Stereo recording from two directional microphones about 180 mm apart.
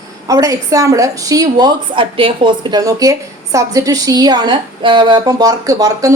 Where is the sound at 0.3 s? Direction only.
20° right (ahead or behind).